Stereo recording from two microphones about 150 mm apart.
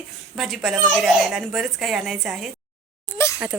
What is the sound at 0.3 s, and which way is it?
Speech, centre (ahead or behind).